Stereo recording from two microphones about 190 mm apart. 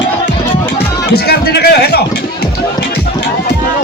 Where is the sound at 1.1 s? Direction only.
60° left (ahead or behind).